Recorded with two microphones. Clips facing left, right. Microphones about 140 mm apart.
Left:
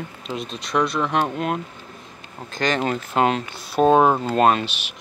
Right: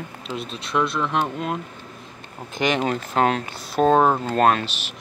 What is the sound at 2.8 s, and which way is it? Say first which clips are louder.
Speech: even; 5° left (ahead or behind).